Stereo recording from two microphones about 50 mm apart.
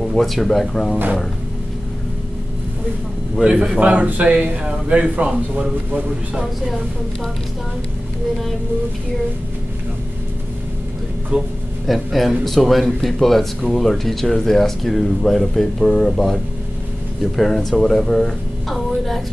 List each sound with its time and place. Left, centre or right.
0.0 s speech: centre
3.4 s a man's voice: centre
11.3 s speech: right
11.8 s speech: centre
17.4 s speech: centre